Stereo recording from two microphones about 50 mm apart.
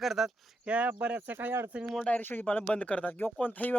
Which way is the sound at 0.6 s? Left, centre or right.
Right.